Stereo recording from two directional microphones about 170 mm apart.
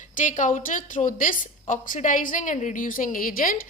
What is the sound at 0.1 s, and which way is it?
A woman's voice, 50° left (ahead or behind).